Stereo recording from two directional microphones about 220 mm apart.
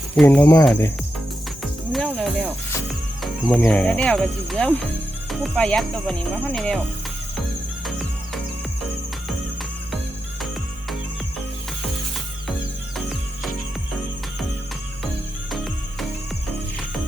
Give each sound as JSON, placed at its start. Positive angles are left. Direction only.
{"t": 0.2, "sound": "speech", "side_deg": 5}
{"t": 1.9, "sound": "cricket", "side_deg": 0}
{"t": 3.5, "sound": "speech", "side_deg": 5}
{"t": 15.4, "sound": "music", "side_deg": 0}